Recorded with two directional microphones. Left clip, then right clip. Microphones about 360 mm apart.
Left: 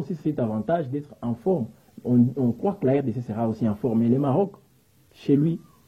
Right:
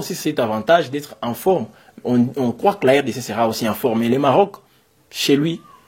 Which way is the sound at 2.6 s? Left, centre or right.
Centre.